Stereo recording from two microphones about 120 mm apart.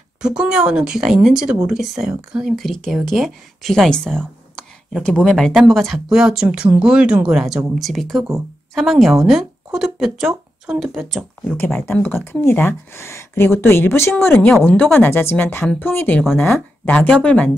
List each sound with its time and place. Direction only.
0.4 s speech: 5° right (ahead or behind)
11.4 s speech: 15° left (ahead or behind)